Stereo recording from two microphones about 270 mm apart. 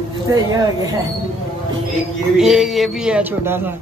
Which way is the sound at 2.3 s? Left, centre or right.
Centre.